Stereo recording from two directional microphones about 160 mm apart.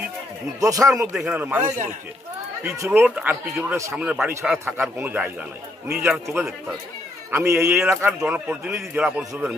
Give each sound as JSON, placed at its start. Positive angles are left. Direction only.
{"t": 0.6, "sound": "speech", "side_deg": -20}